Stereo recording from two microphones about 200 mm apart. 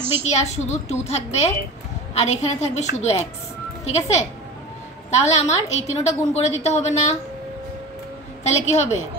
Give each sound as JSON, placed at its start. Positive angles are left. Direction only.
{"t": 0.2, "sound": "a woman's voice", "side_deg": 35}
{"t": 8.6, "sound": "a woman's voice", "side_deg": 35}